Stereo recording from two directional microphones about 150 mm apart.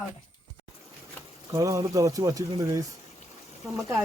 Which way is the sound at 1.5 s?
20° right (ahead or behind).